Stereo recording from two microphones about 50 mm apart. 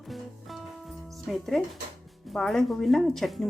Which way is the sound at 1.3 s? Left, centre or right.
Centre.